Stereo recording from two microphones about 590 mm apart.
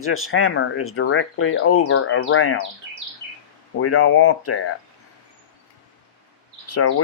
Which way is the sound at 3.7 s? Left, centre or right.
Left.